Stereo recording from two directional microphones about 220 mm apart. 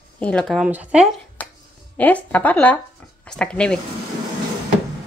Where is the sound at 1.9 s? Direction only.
5° left (ahead or behind).